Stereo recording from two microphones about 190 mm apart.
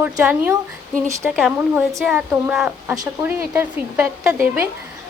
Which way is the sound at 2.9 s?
15° right (ahead or behind).